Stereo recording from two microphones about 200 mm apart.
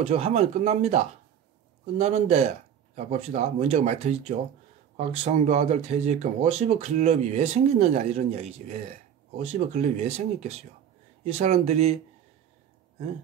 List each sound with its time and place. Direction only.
0.1 s speech: 30° right (ahead or behind)